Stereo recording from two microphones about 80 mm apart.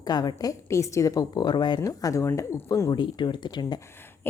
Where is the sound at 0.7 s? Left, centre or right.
Left.